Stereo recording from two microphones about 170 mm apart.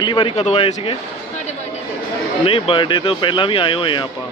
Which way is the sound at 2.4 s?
30° left (ahead or behind).